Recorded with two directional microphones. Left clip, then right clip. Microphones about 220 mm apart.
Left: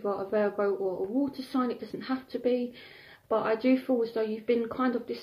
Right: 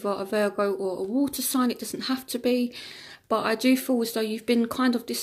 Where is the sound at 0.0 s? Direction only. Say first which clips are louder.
Right 3 dB; 40° right (ahead or behind).